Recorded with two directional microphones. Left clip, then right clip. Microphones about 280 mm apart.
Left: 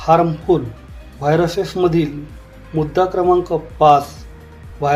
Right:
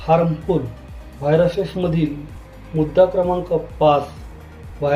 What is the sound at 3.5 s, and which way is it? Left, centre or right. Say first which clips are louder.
Speech: even; left.